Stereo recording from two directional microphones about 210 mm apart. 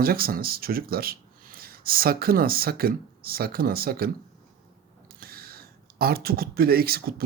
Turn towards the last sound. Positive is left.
turn(degrees=-45)  # may be behind; listen again after turning